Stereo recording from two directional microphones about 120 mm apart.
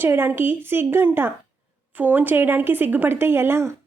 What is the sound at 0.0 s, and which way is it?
A woman's voice, 20° right (ahead or behind).